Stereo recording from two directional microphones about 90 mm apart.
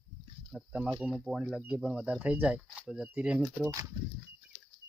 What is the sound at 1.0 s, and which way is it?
Speech, 5° right (ahead or behind).